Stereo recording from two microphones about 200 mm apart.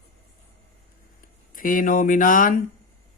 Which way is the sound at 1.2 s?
45° left (ahead or behind).